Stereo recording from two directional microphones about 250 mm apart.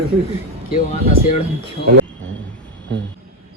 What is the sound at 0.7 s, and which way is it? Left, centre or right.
Speech, left.